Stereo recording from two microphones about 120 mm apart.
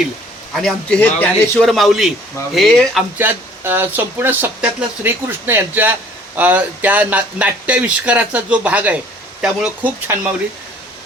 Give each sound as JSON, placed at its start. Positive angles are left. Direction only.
{"t": 0.5, "sound": "a man's voice", "side_deg": 5}
{"t": 3.2, "sound": "speech", "side_deg": -15}